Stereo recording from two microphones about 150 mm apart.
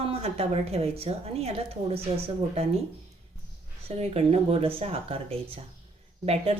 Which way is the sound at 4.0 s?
45° right (ahead or behind).